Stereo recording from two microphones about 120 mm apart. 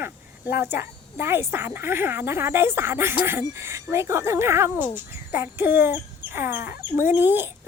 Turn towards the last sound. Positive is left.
turn(degrees=-15)  # may be behind; listen again after turning